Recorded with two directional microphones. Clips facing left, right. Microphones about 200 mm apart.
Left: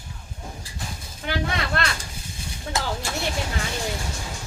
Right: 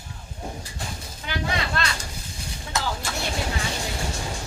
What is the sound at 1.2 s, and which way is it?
Speech, 55° left (ahead or behind).